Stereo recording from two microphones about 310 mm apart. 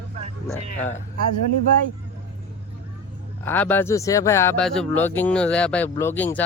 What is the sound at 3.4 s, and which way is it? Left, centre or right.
Speech, centre.